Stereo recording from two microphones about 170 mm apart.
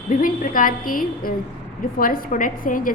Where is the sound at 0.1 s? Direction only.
55° left (ahead or behind).